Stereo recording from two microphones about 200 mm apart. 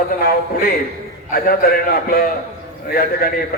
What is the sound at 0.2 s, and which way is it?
A man's voice, 50° left (ahead or behind).